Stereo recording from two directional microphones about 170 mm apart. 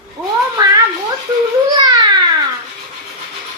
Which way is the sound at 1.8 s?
25° right (ahead or behind).